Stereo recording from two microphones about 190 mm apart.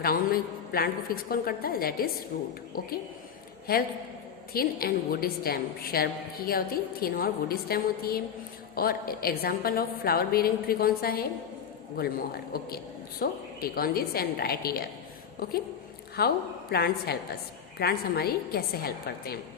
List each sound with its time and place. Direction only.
0.0 s a woman's voice: 50° left (ahead or behind)